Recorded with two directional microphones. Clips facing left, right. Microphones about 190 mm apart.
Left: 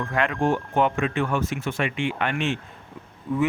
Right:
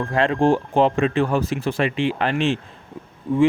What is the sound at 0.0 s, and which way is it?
Speech, 30° right (ahead or behind).